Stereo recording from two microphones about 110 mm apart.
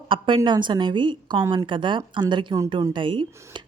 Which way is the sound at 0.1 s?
50° right (ahead or behind).